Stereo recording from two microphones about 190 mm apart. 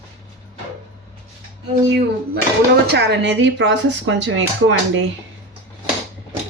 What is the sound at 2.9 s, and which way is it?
Speech, 65° right (ahead or behind).